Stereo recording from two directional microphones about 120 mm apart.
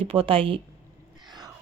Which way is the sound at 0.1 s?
50° right (ahead or behind).